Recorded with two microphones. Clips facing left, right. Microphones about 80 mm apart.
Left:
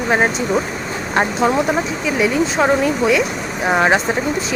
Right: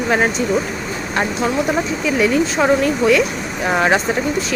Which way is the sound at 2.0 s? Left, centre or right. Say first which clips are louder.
Right 1 dB; centre.